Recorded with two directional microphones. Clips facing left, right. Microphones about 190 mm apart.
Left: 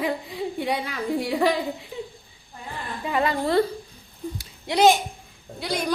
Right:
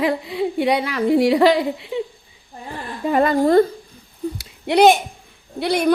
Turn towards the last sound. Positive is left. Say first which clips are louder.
# right 9 dB
turn(degrees=-65)  # may be behind; listen again after turning